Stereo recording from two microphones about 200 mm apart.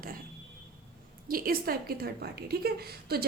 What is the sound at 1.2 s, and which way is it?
A woman's voice, 45° right (ahead or behind).